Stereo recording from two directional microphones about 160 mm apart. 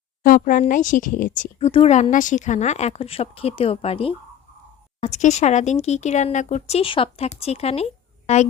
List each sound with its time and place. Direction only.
0.2 s speech: 55° left (ahead or behind); by 7.9 s 40° left (ahead or behind)